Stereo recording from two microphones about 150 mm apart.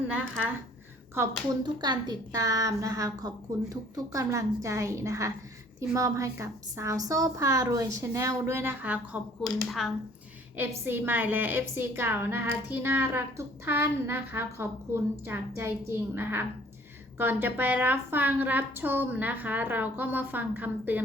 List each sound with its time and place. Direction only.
1.2 s a woman's voice: 15° right (ahead or behind)
1.6 s a woman's voice: 30° right (ahead or behind); by 9.2 s 10° right (ahead or behind)
9.6 s speech: centre (ahead or behind)
10.6 s a woman's voice: 15° right (ahead or behind)